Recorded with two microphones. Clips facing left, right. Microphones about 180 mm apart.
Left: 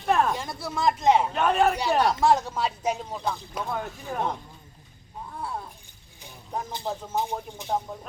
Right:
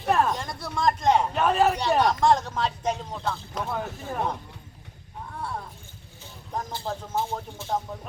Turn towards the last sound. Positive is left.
turn(degrees=15)  # may be behind; listen again after turning